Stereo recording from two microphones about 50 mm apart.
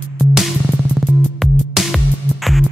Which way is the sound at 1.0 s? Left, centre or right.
Centre.